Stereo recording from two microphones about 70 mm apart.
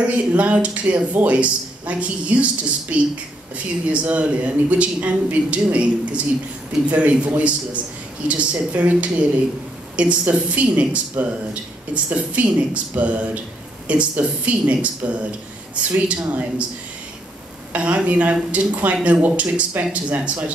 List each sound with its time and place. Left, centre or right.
0.0 s a woman's voice: right
17.7 s speech: right